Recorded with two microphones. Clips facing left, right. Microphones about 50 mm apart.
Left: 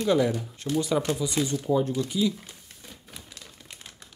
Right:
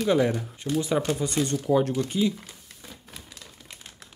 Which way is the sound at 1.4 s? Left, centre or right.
Right.